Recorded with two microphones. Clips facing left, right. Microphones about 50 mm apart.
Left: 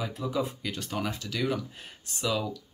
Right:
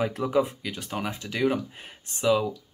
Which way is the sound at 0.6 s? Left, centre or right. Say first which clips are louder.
Right 1 dB; centre.